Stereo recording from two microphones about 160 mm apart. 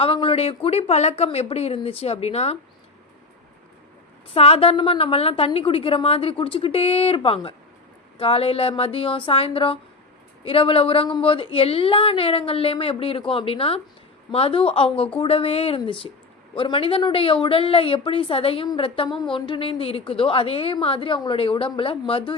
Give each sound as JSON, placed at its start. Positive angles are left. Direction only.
{"t": 0.0, "sound": "a woman's voice", "side_deg": 35}
{"t": 4.4, "sound": "a woman's voice", "side_deg": 35}